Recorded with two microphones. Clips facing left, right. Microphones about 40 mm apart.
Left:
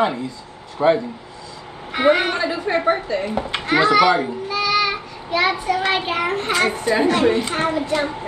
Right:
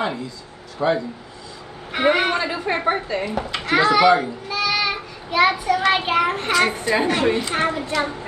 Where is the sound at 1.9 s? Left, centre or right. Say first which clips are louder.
Left 1 dB; right.